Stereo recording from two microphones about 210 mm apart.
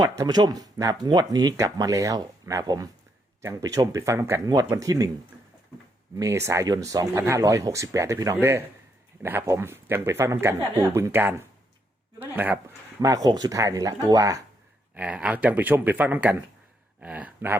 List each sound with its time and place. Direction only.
0.0 s speech: 20° right (ahead or behind)
6.1 s speech: 15° right (ahead or behind)